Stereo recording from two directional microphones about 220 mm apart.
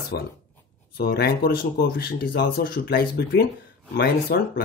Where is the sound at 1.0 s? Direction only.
45° left (ahead or behind).